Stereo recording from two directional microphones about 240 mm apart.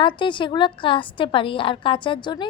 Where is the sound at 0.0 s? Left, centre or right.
Centre.